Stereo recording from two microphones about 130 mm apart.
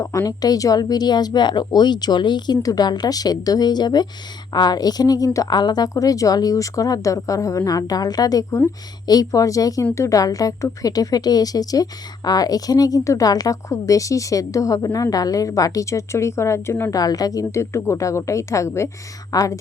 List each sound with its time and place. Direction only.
0.0 s a woman's voice: 25° left (ahead or behind)